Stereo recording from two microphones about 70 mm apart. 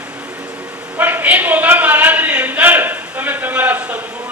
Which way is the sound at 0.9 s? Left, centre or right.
Right.